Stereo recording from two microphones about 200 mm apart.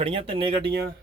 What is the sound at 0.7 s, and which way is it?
Speech, 50° right (ahead or behind).